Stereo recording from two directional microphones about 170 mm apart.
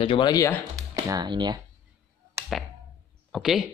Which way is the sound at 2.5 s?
Centre (ahead or behind).